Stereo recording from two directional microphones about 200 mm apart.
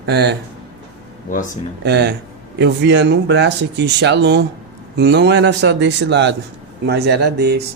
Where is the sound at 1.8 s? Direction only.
55° right (ahead or behind).